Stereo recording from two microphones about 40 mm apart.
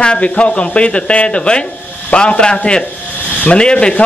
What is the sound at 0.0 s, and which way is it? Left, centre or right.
A man's voice, left.